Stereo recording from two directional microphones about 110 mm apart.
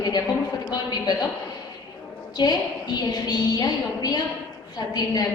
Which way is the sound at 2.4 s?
40° left (ahead or behind).